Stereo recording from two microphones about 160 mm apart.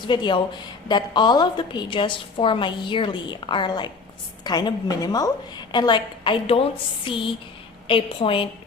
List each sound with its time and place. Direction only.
0.1 s a woman's voice: 30° left (ahead or behind)